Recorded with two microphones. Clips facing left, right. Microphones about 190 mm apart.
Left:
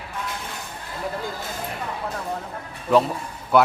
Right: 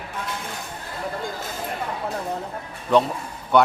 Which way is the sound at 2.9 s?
5° left (ahead or behind).